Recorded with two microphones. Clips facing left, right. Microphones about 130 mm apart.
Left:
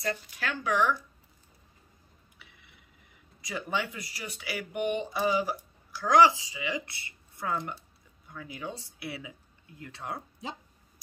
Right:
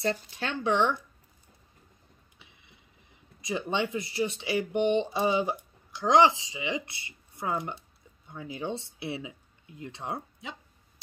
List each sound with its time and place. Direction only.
0.0 s speech: 25° right (ahead or behind)
2.3 s a sound: 20° right (ahead or behind)
3.3 s speech: 20° right (ahead or behind)